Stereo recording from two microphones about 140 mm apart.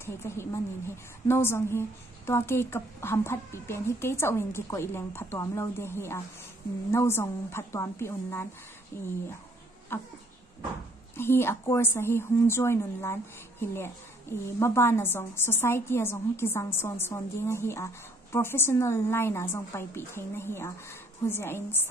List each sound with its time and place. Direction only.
0.0 s a woman's voice: 20° left (ahead or behind)
9.9 s a woman's voice: 15° left (ahead or behind)
11.1 s a woman's voice: 15° left (ahead or behind)